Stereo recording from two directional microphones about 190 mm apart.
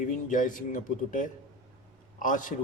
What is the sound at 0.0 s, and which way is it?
Speech, 40° left (ahead or behind).